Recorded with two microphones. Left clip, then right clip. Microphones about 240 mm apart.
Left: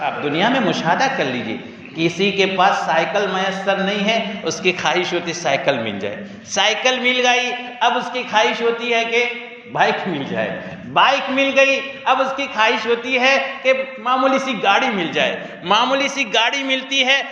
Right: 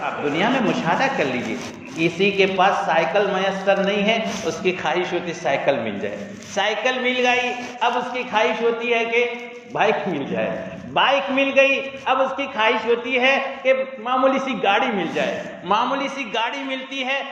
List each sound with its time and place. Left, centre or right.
0.0 s a man's voice: left